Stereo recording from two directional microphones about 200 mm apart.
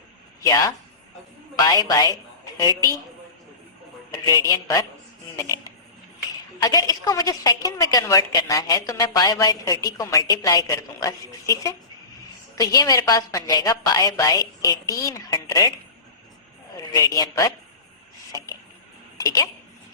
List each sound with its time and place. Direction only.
1.5 s a woman's voice: 20° left (ahead or behind)
4.1 s a woman's voice: 15° left (ahead or behind)
5.4 s a sound: 15° left (ahead or behind)
6.6 s a woman's voice: 15° left (ahead or behind)
16.9 s a woman's voice: 15° left (ahead or behind)